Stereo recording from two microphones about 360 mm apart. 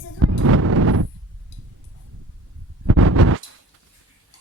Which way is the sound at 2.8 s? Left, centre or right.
Right.